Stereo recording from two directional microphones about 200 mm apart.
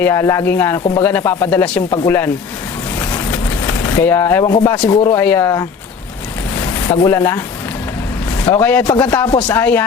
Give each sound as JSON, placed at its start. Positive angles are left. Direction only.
{"t": 0.0, "sound": "speech", "side_deg": 15}
{"t": 8.6, "sound": "speech", "side_deg": 10}